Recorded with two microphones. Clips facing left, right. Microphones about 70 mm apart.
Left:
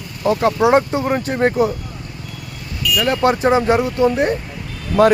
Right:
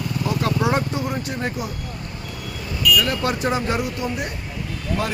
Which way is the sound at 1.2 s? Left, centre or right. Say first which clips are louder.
Left 11 dB; left.